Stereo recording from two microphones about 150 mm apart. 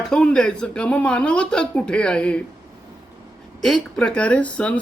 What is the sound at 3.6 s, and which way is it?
Speech, 5° left (ahead or behind).